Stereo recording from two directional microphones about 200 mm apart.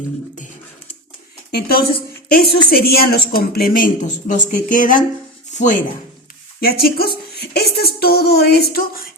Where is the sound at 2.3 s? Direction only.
50° left (ahead or behind).